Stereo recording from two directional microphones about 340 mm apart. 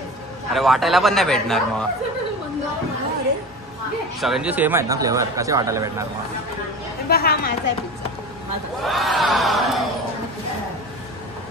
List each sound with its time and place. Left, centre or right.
0.5 s a man's voice: centre
4.2 s speech: centre
7.1 s speech: left
8.8 s crowd: centre